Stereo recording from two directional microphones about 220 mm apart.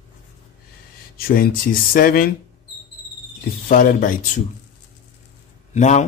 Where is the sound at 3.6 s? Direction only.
40° left (ahead or behind).